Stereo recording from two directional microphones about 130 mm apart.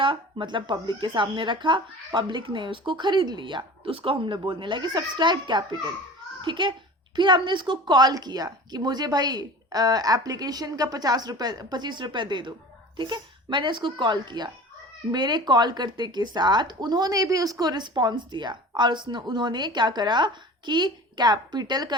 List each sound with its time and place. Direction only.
0.0 s a child's voice: 40° right (ahead or behind)